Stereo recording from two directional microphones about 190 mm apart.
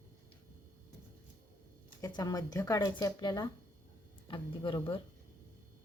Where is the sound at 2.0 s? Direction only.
20° left (ahead or behind).